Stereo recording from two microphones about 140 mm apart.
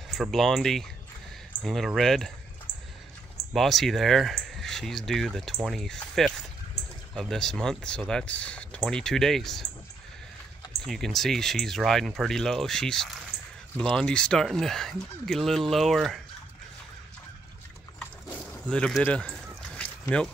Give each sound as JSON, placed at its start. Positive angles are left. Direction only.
{"t": 0.1, "sound": "speech", "side_deg": 0}
{"t": 3.5, "sound": "speech", "side_deg": 0}
{"t": 10.8, "sound": "speech", "side_deg": 0}
{"t": 17.9, "sound": "a sound", "side_deg": 5}